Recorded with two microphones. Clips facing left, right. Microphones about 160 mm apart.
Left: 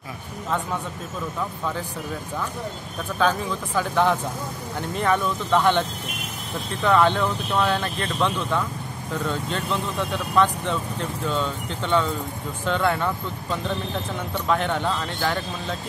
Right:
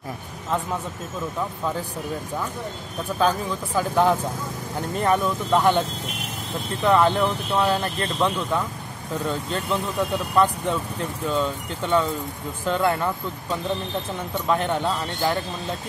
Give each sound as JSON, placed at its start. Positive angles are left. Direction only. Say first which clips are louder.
{"t": 3.3, "sound": "speech", "louder": "even", "side_deg": -10}
{"t": 9.7, "sound": "speech", "louder": "right 4 dB", "side_deg": -10}